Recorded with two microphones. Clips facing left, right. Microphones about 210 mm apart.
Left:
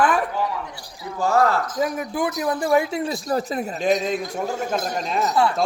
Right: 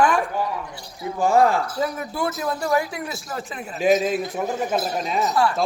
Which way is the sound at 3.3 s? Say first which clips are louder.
Left 8 dB; 40° left (ahead or behind).